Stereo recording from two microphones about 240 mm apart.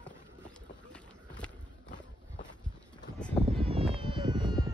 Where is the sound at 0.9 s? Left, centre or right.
Centre.